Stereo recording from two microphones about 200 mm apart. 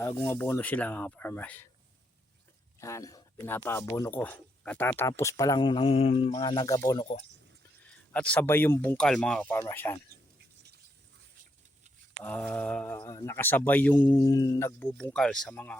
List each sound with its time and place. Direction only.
0.0 s speech: 15° left (ahead or behind)
2.8 s speech: 15° left (ahead or behind)
8.1 s speech: 5° left (ahead or behind)
12.2 s speech: 10° left (ahead or behind)